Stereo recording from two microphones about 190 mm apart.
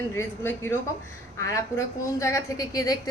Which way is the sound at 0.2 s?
10° left (ahead or behind).